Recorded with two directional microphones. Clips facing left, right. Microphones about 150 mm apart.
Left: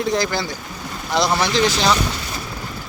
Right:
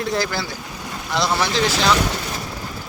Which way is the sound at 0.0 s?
Centre (ahead or behind).